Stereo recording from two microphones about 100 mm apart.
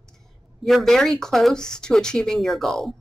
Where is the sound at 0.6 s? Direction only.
Centre (ahead or behind).